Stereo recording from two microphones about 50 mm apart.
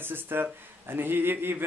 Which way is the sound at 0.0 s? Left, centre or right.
Right.